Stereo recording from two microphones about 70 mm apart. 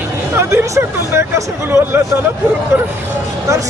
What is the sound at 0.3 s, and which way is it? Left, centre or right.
Speech, right.